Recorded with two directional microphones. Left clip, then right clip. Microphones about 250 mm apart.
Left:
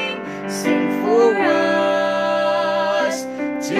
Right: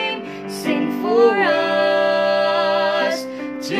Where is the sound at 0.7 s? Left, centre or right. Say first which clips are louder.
Left 2 dB; left.